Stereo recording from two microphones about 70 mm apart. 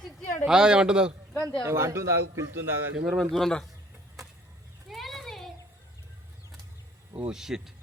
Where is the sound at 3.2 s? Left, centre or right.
Centre.